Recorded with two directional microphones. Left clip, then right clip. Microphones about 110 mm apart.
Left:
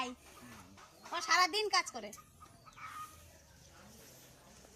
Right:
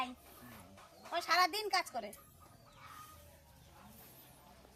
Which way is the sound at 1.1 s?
20° right (ahead or behind).